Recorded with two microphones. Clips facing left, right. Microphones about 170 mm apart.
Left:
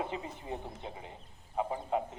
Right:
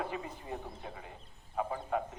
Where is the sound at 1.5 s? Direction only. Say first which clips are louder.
Left 1 dB; 20° left (ahead or behind).